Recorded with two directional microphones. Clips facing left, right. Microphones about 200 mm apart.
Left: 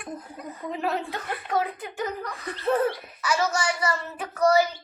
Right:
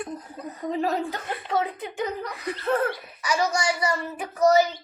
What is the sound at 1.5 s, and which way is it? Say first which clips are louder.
A child's voice: right 1 dB; 20° right (ahead or behind).